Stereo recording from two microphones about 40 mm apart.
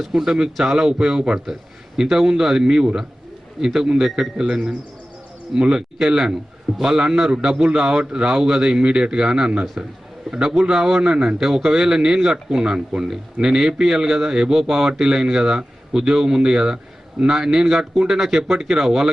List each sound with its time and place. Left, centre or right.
0.1 s a man's voice: centre
8.4 s a man's voice: centre
9.8 s a man's voice: right
10.3 s speech: centre
11.0 s a man's voice: right
11.3 s speech: centre